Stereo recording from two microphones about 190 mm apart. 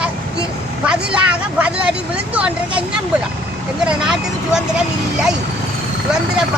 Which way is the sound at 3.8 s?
5° right (ahead or behind).